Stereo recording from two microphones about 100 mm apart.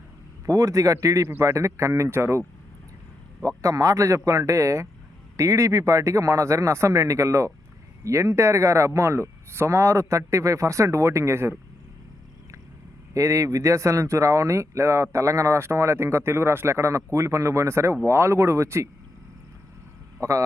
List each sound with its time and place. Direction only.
0.4 s speech: 35° right (ahead or behind)
3.4 s speech: 35° right (ahead or behind)
13.1 s speech: 30° right (ahead or behind)